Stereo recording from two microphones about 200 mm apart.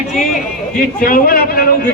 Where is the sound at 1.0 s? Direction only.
45° left (ahead or behind).